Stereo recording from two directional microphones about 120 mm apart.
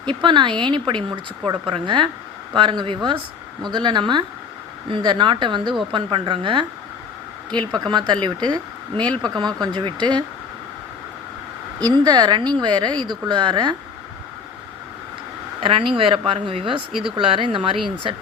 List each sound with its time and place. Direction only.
0.0 s speech: 40° right (ahead or behind)
7.9 s speech: 40° right (ahead or behind)
11.8 s speech: 35° right (ahead or behind)
15.6 s speech: 45° right (ahead or behind)